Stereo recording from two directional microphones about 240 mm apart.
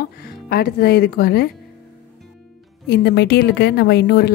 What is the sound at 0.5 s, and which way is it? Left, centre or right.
A woman's voice, left.